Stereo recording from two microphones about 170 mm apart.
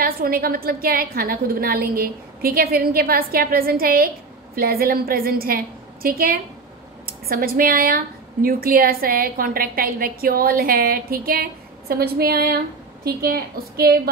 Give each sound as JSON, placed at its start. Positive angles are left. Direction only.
{"t": 0.0, "sound": "a woman's voice", "side_deg": -60}